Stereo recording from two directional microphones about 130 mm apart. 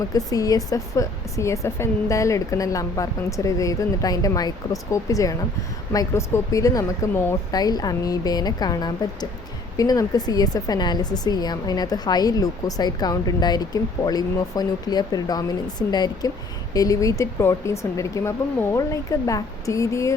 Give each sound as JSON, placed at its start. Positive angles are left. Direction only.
{"t": 0.1, "sound": "a woman's voice", "side_deg": 30}